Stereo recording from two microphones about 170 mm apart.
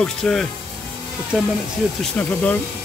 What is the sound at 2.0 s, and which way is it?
Speech, centre (ahead or behind).